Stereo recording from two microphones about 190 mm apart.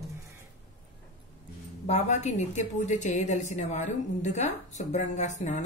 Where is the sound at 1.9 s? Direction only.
35° left (ahead or behind).